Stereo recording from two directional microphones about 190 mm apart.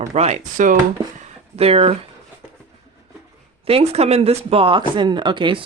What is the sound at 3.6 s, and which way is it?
Speech, 30° right (ahead or behind).